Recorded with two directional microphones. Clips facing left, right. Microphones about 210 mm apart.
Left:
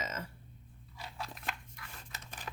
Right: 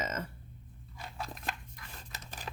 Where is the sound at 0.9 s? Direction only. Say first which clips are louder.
Right 2 dB; 50° right (ahead or behind).